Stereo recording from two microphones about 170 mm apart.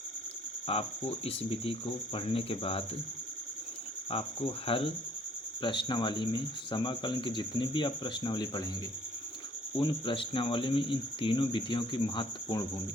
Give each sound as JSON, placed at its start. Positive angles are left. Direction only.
{"t": 0.7, "sound": "speech", "side_deg": 35}
{"t": 4.1, "sound": "speech", "side_deg": 35}
{"t": 9.7, "sound": "speech", "side_deg": 30}